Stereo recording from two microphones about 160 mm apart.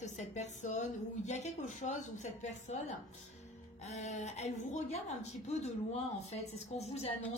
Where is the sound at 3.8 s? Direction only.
50° left (ahead or behind).